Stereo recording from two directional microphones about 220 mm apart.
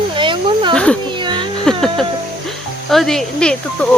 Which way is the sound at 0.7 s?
5° left (ahead or behind).